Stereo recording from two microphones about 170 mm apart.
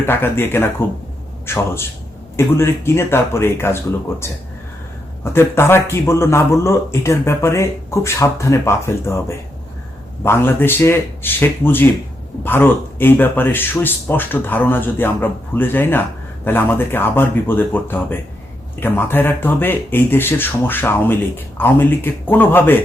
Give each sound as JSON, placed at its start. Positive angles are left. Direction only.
{"t": 0.0, "sound": "speech", "side_deg": 15}
{"t": 5.2, "sound": "speech", "side_deg": 15}